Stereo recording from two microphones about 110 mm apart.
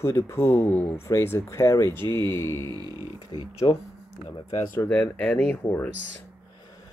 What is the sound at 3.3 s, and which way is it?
Speech, 55° left (ahead or behind).